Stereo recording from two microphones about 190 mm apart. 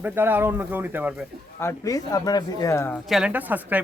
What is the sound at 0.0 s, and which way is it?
Speech, 10° right (ahead or behind).